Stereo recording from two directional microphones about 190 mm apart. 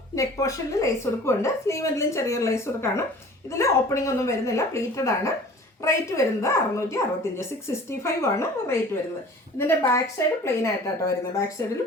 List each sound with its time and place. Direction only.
0.2 s speech: 15° left (ahead or behind)